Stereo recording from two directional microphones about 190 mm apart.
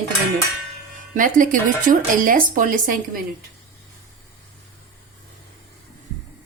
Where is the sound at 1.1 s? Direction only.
45° right (ahead or behind).